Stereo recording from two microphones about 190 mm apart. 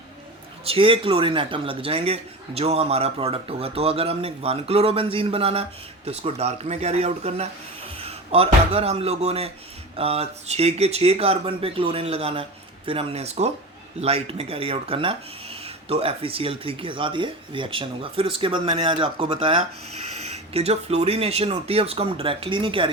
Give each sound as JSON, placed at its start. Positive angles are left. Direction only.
{"t": 0.6, "sound": "speech", "side_deg": -30}
{"t": 7.9, "sound": "a sound", "side_deg": -30}
{"t": 8.7, "sound": "speech", "side_deg": -30}